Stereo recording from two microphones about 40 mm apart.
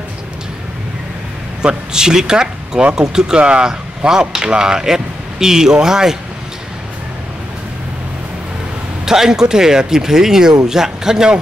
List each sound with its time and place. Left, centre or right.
1.6 s speech: centre
3.3 s speech: right
9.0 s speech: centre